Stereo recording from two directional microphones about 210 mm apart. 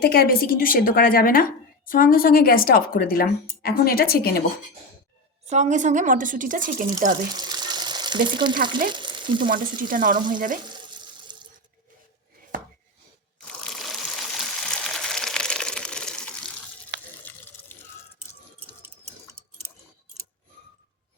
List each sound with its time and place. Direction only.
0.0 s a woman's voice: 45° left (ahead or behind)
5.5 s speech: 35° right (ahead or behind)
7.3 s water: 20° right (ahead or behind)
8.9 s frying: 20° right (ahead or behind)
9.4 s speech: 40° right (ahead or behind)
10.2 s frying: 20° right (ahead or behind)
11.3 s sink: 20° right (ahead or behind)
13.7 s a sound: centre (ahead or behind)
16.9 s water: 55° right (ahead or behind)
17.2 s a sound: 10° left (ahead or behind)